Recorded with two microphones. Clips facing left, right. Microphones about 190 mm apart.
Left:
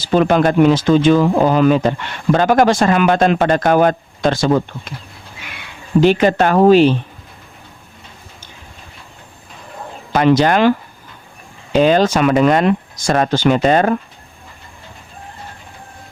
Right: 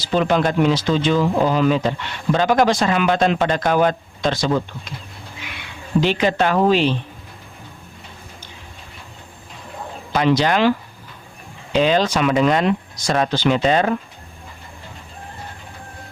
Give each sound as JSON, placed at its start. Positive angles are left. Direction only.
{"t": 0.0, "sound": "speech", "side_deg": 50}
{"t": 6.0, "sound": "speech", "side_deg": 50}
{"t": 10.1, "sound": "speech", "side_deg": 50}